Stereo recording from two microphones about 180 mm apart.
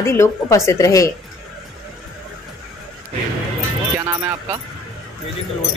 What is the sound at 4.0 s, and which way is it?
Speech, 15° right (ahead or behind).